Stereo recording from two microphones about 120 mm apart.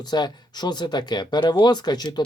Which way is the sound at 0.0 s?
35° left (ahead or behind).